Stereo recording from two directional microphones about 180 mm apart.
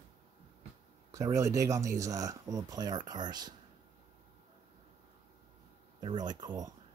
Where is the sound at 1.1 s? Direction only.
20° right (ahead or behind).